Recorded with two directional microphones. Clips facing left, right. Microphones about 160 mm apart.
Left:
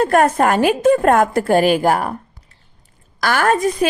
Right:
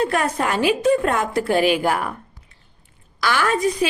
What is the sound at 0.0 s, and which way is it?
Speech, 50° left (ahead or behind).